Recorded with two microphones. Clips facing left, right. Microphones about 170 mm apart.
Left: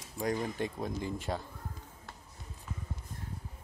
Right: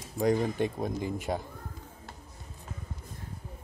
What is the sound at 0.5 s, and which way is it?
Speech, 20° right (ahead or behind).